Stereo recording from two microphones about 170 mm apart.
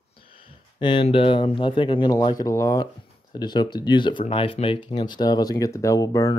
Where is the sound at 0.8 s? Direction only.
30° left (ahead or behind).